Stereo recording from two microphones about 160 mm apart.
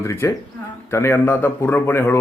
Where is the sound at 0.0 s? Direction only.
20° left (ahead or behind).